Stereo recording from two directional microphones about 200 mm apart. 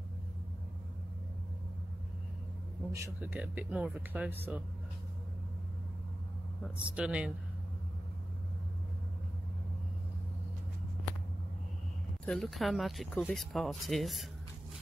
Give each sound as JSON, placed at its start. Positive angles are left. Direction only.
{"t": 2.9, "sound": "speech", "side_deg": -10}
{"t": 6.6, "sound": "speech", "side_deg": -5}
{"t": 12.3, "sound": "speech", "side_deg": 0}